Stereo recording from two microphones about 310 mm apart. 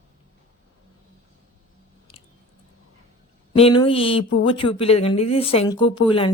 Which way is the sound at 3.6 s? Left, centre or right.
Centre.